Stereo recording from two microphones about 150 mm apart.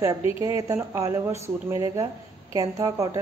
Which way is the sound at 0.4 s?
25° right (ahead or behind).